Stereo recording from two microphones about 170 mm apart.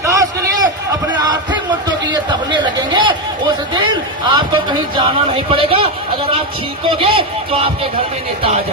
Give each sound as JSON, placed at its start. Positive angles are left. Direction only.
{"t": 0.0, "sound": "a sound", "side_deg": -20}
{"t": 2.3, "sound": "chatter", "side_deg": -25}
{"t": 4.3, "sound": "speech", "side_deg": -25}
{"t": 6.9, "sound": "speech", "side_deg": -30}